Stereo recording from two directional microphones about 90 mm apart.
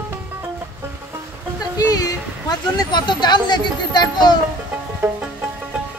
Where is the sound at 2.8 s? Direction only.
55° left (ahead or behind).